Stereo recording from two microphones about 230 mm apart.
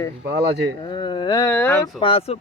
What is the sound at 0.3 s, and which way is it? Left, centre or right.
Speech, right.